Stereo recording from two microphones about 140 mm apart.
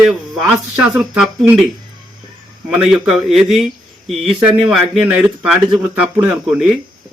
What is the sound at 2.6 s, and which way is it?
Speech, centre (ahead or behind).